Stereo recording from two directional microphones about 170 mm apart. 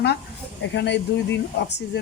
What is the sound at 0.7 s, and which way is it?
Speech, 90° left.